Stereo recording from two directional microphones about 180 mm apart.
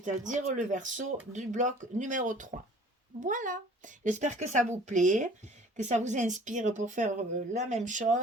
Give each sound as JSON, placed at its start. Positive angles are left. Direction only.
{"t": 0.0, "sound": "speech", "side_deg": -45}